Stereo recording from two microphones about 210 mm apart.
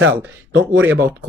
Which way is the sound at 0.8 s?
10° right (ahead or behind).